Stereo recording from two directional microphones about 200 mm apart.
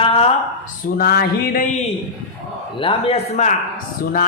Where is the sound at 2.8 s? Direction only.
30° left (ahead or behind).